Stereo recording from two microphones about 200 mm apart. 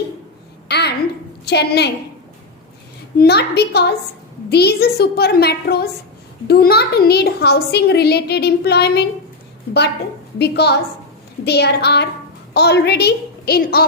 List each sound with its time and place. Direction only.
0.7 s babbling: 55° left (ahead or behind)
1.5 s a woman's voice: 55° left (ahead or behind)
3.2 s a woman's voice: 55° left (ahead or behind)